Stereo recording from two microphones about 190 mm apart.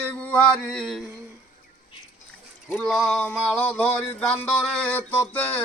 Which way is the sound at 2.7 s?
5° left (ahead or behind).